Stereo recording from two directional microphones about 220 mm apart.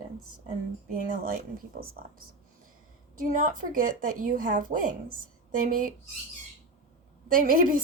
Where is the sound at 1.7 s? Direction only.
40° right (ahead or behind).